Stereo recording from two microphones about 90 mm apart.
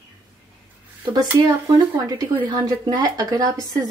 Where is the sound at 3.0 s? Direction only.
40° right (ahead or behind).